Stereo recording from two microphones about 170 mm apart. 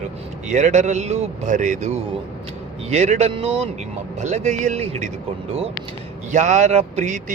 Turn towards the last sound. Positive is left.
turn(degrees=-45)  # may be behind; listen again after turning